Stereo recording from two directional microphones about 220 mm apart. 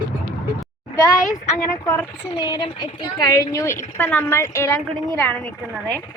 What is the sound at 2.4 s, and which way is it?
Speech, 20° left (ahead or behind).